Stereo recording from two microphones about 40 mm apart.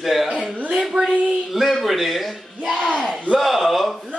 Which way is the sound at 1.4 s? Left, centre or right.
Centre.